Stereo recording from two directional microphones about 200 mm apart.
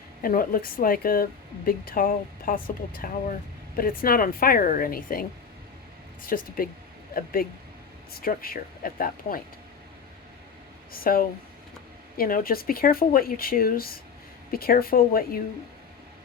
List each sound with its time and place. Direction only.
0.2 s speech: 45° left (ahead or behind)
6.2 s speech: 45° left (ahead or behind)
10.9 s speech: 45° left (ahead or behind)